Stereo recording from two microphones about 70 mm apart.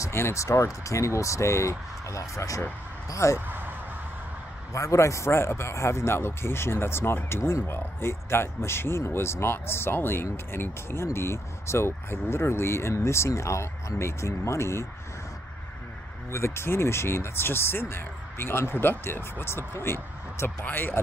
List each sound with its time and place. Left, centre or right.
0.0 s speech: left
3.3 s a sound: right
4.7 s a man's voice: left
16.3 s a man's voice: left